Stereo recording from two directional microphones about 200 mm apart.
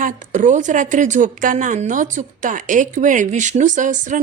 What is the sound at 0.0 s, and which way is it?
A woman's voice, 40° right (ahead or behind).